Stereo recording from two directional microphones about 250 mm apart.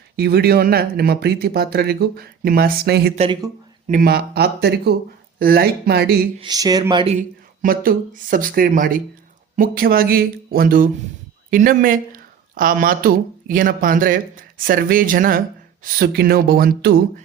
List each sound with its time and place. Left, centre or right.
0.2 s speech: right
3.2 s speech: right
3.9 s speech: right
6.4 s speech: centre; by 17.0 s right